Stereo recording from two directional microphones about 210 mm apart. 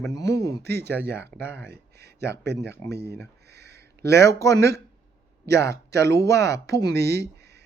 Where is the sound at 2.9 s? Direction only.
50° right (ahead or behind).